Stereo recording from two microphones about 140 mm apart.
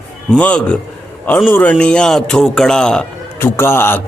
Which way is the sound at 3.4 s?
15° left (ahead or behind).